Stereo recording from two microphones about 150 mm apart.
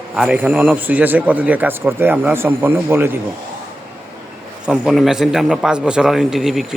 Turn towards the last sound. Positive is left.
turn(degrees=0)  # may be behind; listen again after turning